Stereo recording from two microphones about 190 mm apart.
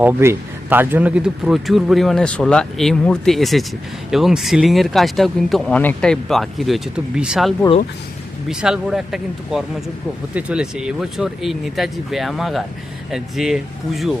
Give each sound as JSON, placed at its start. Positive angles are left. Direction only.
{"t": 0.0, "sound": "a man's voice", "side_deg": -10}